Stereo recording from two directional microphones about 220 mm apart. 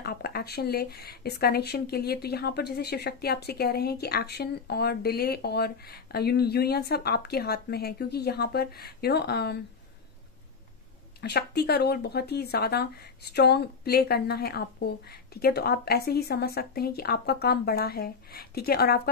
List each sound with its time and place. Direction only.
0.0 s speech: 45° left (ahead or behind)
11.1 s speech: 45° left (ahead or behind)